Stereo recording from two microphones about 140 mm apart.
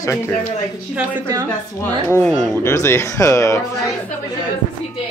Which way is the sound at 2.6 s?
20° left (ahead or behind).